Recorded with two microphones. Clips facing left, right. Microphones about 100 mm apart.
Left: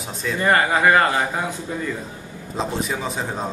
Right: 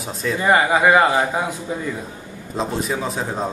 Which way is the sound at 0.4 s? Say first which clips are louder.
Right 2 dB; 15° right (ahead or behind).